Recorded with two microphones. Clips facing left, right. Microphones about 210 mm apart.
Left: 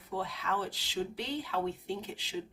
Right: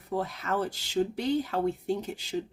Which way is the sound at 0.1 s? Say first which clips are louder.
Right 5 dB; 45° right (ahead or behind).